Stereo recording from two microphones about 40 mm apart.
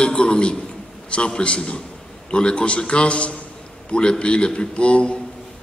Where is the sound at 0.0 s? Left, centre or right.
Left.